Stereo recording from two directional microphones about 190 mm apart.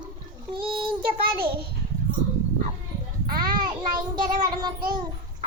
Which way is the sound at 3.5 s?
25° right (ahead or behind).